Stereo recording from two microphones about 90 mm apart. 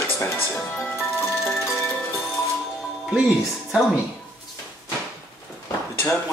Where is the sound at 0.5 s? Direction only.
5° left (ahead or behind).